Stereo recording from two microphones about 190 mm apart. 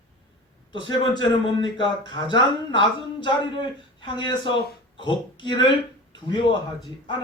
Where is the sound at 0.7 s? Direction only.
25° left (ahead or behind).